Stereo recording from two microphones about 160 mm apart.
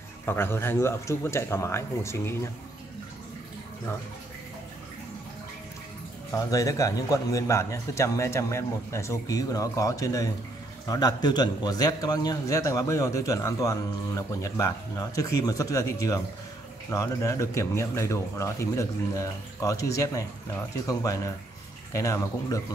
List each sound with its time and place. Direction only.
0.2 s a man's voice: 15° left (ahead or behind)
6.3 s a man's voice: 20° left (ahead or behind)